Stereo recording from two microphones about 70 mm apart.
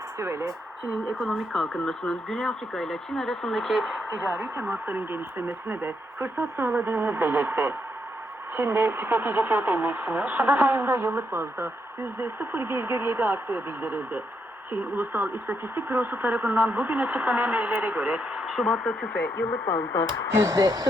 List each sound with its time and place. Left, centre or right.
0.2 s speech: right
1.2 s speech: centre
4.2 s speech: centre
18.4 s speech: centre
19.2 s speech: left
19.7 s speech: left
20.3 s speech: right